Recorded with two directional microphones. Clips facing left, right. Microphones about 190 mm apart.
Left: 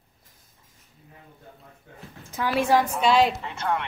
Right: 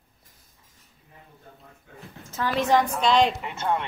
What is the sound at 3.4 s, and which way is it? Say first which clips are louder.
Speech: right 1 dB; 20° right (ahead or behind).